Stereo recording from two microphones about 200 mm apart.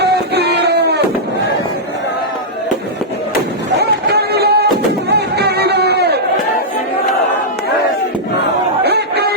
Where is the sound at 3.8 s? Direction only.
55° right (ahead or behind).